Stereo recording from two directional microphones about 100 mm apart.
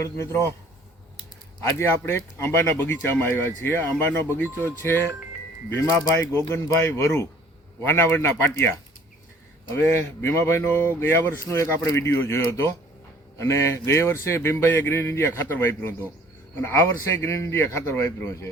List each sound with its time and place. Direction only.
0.2 s speech: 25° left (ahead or behind)
1.6 s speech: 25° left (ahead or behind)
6.5 s speech: 25° left (ahead or behind)
9.7 s speech: 20° left (ahead or behind)